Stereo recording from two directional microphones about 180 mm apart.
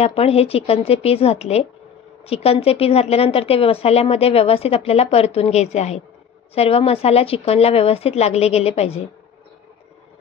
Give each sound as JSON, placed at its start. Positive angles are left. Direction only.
{"t": 0.0, "sound": "a woman's voice", "side_deg": 35}